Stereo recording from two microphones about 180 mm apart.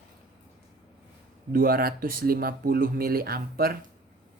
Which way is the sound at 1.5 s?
55° right (ahead or behind).